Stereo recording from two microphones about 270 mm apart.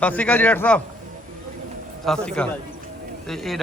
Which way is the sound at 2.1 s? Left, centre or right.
Centre.